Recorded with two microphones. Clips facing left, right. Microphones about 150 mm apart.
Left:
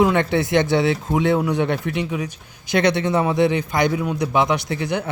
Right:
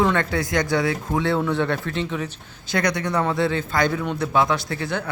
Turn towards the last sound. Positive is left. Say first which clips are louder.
# left 3 dB
turn(degrees=20)  # may be behind; listen again after turning